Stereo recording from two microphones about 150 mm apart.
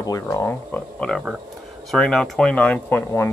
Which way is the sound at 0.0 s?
20° left (ahead or behind).